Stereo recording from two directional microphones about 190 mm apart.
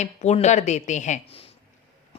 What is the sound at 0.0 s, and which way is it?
Speech, 35° left (ahead or behind).